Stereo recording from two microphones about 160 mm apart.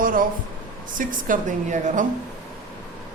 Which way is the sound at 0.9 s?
55° right (ahead or behind).